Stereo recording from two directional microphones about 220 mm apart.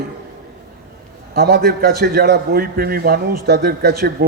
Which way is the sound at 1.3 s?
45° right (ahead or behind).